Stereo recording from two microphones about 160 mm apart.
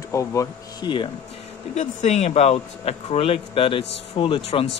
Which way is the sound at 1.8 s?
50° left (ahead or behind).